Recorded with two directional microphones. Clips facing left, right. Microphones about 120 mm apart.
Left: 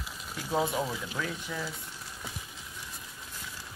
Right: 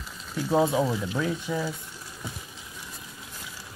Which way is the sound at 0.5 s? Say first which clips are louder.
Right 7 dB; 30° right (ahead or behind).